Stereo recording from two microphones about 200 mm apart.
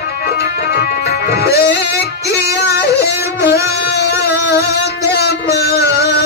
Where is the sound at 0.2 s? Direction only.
55° left (ahead or behind).